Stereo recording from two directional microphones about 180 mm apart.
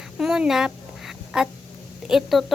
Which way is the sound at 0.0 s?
5° right (ahead or behind).